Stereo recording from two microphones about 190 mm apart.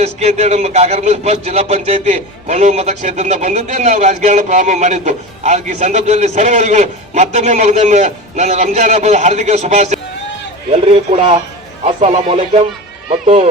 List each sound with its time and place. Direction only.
0.0 s a man's voice: 35° right (ahead or behind)